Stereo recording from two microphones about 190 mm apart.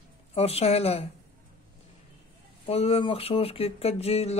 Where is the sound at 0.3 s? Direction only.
30° left (ahead or behind).